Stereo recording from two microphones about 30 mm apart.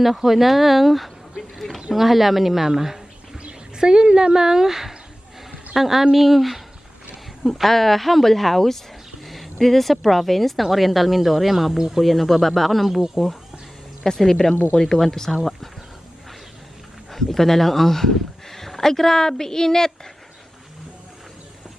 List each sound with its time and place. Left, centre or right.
0.3 s speech: centre
1.4 s a sound: centre
1.9 s speech: centre
3.8 s a woman's voice: right; by 12.9 s centre
12.9 s a woman's voice: centre
14.2 s speech: centre
17.1 s speech: centre